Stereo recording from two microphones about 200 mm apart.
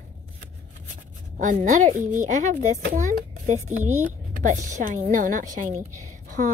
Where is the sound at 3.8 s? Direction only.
90° right.